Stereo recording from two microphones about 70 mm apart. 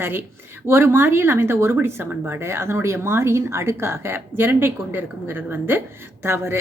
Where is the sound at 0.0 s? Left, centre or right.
Right.